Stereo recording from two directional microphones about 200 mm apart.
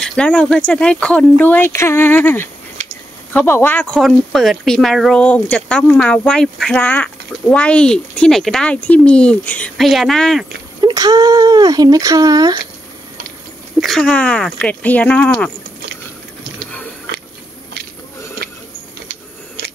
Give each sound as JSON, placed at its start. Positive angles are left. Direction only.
{"t": 0.0, "sound": "speech", "side_deg": 5}
{"t": 10.8, "sound": "speech", "side_deg": -20}
{"t": 13.7, "sound": "speech", "side_deg": 0}